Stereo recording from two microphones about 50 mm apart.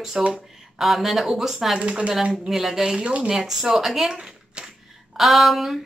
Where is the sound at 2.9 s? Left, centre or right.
Right.